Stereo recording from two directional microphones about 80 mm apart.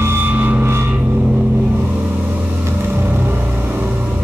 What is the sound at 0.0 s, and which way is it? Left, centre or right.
Vehicle, right.